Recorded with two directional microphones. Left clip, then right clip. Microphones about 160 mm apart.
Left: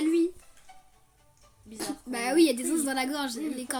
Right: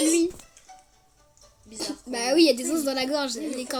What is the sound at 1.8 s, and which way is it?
A woman's voice, 15° left (ahead or behind).